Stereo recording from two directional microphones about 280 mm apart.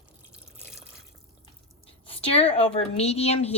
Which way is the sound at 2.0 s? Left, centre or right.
Left.